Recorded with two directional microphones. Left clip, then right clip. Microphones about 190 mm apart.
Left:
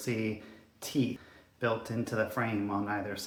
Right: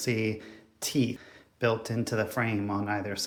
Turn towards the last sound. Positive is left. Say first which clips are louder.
# right 3 dB
turn(degrees=-35)  # may be behind; listen again after turning